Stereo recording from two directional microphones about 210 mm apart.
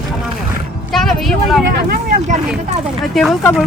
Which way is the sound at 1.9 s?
40° right (ahead or behind).